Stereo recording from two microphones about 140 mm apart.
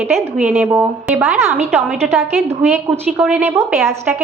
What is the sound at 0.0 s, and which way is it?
A woman's voice, 5° right (ahead or behind).